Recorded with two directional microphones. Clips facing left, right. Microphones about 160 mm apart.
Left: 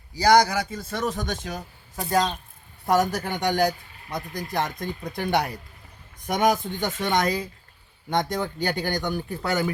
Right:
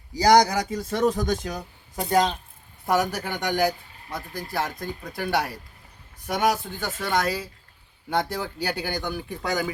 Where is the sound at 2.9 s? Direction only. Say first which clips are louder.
Left 2 dB; 10° right (ahead or behind).